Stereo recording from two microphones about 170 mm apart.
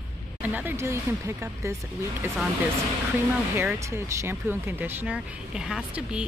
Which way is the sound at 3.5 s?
15° right (ahead or behind).